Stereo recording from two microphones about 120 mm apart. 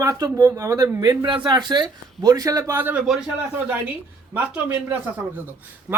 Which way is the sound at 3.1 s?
5° right (ahead or behind).